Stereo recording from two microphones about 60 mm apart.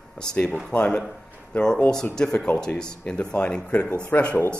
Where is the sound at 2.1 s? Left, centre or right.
Centre.